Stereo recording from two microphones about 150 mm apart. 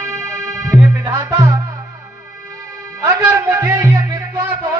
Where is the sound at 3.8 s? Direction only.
25° right (ahead or behind).